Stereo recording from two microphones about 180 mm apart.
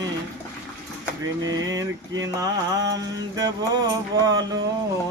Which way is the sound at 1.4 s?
20° right (ahead or behind).